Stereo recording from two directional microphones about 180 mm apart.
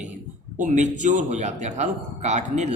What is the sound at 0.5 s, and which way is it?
A man's voice, 45° right (ahead or behind).